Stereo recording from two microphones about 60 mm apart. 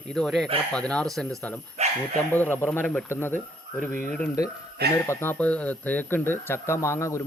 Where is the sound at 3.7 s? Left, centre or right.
Centre.